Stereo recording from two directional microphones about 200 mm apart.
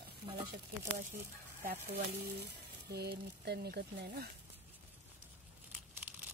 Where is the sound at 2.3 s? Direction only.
55° right (ahead or behind).